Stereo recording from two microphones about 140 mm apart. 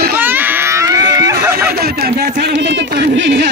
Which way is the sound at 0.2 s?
15° right (ahead or behind).